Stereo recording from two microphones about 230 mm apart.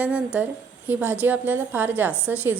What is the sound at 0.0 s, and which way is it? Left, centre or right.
A woman's voice, centre.